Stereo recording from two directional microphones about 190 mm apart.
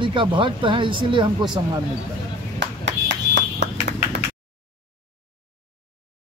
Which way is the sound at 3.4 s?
65° right (ahead or behind).